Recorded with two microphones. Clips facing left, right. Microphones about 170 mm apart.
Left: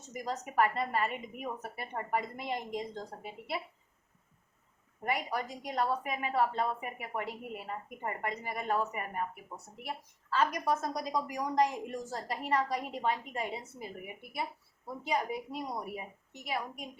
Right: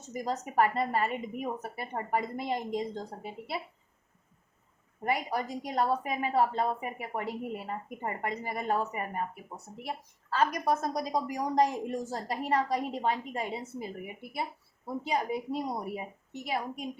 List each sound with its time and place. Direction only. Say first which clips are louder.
0.1 s a woman's voice: right 4 dB; 35° right (ahead or behind)
5.0 s a woman's voice: right 3 dB; 35° right (ahead or behind)